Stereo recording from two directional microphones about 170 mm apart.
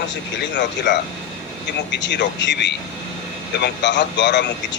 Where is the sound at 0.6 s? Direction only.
90° left.